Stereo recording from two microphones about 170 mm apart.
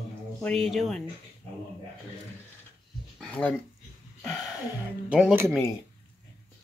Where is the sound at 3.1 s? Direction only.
5° left (ahead or behind).